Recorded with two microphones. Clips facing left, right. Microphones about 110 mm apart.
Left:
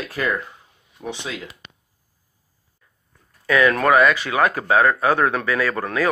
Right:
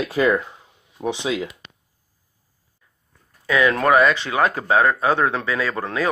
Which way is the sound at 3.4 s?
20° right (ahead or behind).